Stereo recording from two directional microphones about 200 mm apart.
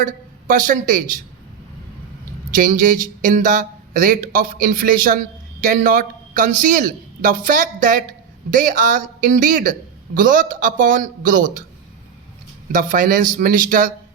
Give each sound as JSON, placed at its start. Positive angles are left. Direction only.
{"t": 0.0, "sound": "a woman's voice", "side_deg": -40}
{"t": 2.6, "sound": "speech", "side_deg": -40}
{"t": 12.7, "sound": "speech", "side_deg": -40}